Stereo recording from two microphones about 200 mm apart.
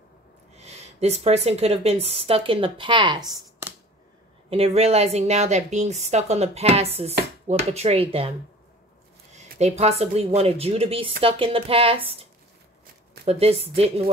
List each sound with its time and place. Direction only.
0.6 s speech: 35° right (ahead or behind)
4.5 s speech: 30° right (ahead or behind)
9.3 s speech: 35° right (ahead or behind)